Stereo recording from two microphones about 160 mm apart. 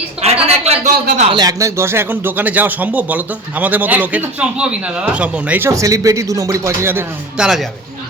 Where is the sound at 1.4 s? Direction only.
20° right (ahead or behind).